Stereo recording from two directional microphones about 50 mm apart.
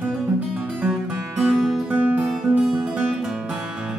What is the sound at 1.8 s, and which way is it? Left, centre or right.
Music, right.